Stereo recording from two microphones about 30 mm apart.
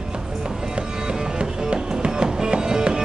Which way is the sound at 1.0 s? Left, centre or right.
Right.